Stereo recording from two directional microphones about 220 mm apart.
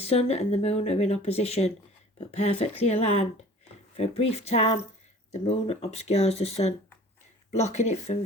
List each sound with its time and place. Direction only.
0.0 s speech: 30° left (ahead or behind)